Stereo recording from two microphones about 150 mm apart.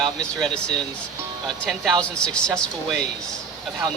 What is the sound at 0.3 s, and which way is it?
Speech, 5° left (ahead or behind).